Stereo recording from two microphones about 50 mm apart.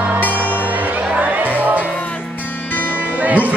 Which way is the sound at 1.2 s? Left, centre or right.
Right.